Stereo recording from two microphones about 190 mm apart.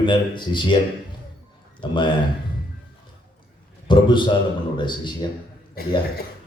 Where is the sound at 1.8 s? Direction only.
25° left (ahead or behind).